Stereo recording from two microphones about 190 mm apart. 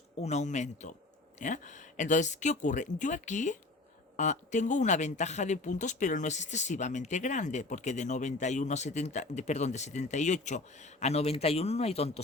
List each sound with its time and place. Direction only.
0.2 s speech: 35° left (ahead or behind)